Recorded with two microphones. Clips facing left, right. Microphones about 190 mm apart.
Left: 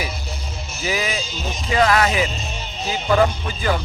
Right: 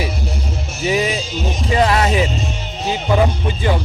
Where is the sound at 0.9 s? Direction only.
30° right (ahead or behind).